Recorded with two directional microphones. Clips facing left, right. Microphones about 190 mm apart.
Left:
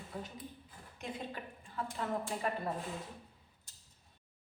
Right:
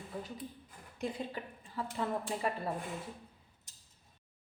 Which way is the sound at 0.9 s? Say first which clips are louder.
Right 4 dB; 35° right (ahead or behind).